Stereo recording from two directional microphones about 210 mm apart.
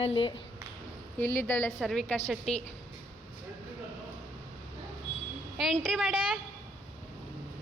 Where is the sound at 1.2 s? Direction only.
10° left (ahead or behind).